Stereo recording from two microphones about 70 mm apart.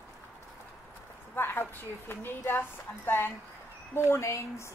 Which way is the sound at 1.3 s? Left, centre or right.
Left.